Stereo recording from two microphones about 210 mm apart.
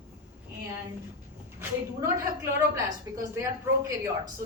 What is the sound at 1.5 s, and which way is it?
Speech, 10° right (ahead or behind).